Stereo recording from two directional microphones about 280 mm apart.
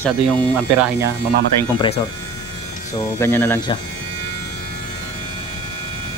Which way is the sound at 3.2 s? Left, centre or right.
Centre.